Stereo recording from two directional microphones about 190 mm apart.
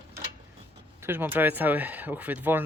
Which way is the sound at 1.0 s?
10° right (ahead or behind).